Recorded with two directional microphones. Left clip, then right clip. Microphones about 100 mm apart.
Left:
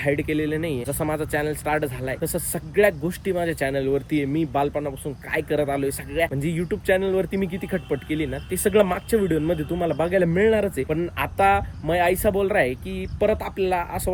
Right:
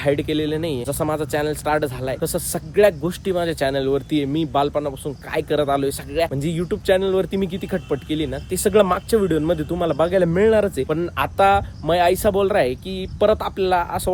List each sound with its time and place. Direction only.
0.0 s speech: 40° right (ahead or behind)